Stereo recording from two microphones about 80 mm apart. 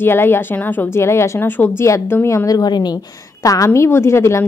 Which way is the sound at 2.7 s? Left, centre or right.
Left.